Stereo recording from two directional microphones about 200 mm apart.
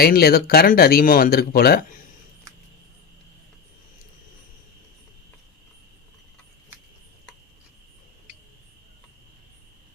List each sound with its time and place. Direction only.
0.0 s speech: 50° left (ahead or behind)